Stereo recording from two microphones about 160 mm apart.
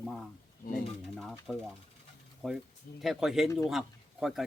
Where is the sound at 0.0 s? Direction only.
Centre (ahead or behind).